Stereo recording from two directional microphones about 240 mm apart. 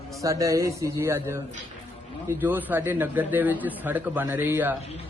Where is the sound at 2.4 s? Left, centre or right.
Centre.